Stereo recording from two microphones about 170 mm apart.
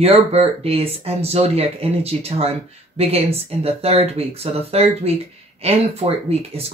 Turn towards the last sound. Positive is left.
turn(degrees=-35)  # may be behind; listen again after turning